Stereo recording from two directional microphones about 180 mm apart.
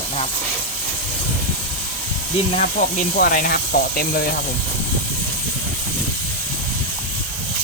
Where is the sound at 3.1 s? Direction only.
55° left (ahead or behind).